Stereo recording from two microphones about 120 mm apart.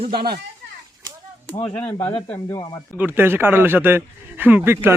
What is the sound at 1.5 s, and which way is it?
Speech, 55° left (ahead or behind).